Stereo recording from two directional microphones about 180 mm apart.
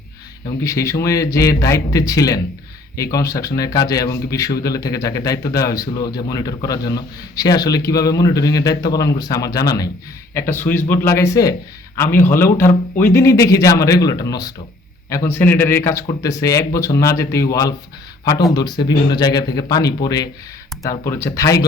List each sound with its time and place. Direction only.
0.6 s speech: 15° left (ahead or behind)